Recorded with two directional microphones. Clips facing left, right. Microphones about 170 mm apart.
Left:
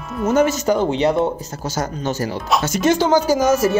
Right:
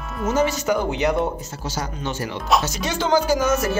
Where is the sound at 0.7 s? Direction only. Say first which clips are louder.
Left 4 dB; 30° left (ahead or behind).